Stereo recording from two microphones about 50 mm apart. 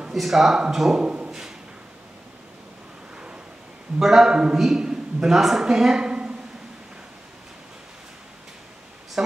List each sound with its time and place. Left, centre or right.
0.1 s speech: centre
0.9 s speech: right
4.0 s a man's voice: centre